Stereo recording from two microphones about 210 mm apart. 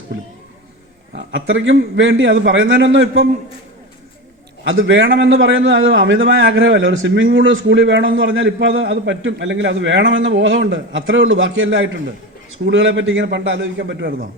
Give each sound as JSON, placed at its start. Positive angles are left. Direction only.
{"t": 1.1, "sound": "a man's voice", "side_deg": -65}
{"t": 4.6, "sound": "a man's voice", "side_deg": -65}